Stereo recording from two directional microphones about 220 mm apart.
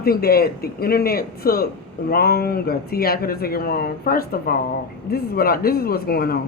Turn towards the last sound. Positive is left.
turn(degrees=45)  # may be behind; listen again after turning